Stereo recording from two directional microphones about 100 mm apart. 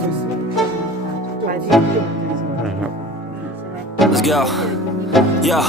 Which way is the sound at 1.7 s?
Centre (ahead or behind).